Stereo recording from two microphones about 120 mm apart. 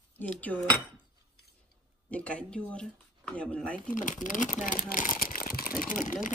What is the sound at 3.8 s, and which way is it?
Speech, 90° left.